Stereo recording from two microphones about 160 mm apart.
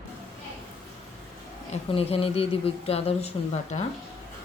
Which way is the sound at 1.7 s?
40° left (ahead or behind).